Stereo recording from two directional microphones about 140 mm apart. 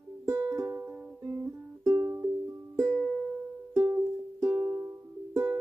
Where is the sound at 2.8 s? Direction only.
5° left (ahead or behind).